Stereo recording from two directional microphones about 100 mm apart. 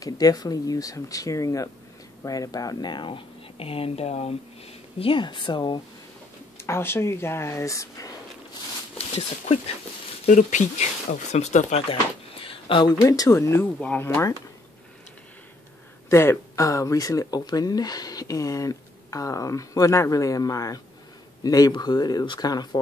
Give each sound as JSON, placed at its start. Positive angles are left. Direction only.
{"t": 0.0, "sound": "speech", "side_deg": 40}
{"t": 4.9, "sound": "speech", "side_deg": 60}
{"t": 6.6, "sound": "speech", "side_deg": 25}
{"t": 8.9, "sound": "speech", "side_deg": 90}
{"t": 11.3, "sound": "speech", "side_deg": 90}
{"t": 13.0, "sound": "speech", "side_deg": 35}
{"t": 13.7, "sound": "speech", "side_deg": 15}
{"t": 14.0, "sound": "speech", "side_deg": 25}
{"t": 16.1, "sound": "a man's voice", "side_deg": 25}